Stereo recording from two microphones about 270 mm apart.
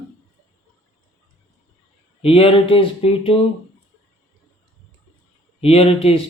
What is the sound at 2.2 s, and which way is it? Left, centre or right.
Speech, left.